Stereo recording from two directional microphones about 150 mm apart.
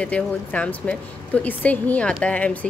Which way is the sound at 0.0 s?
10° left (ahead or behind).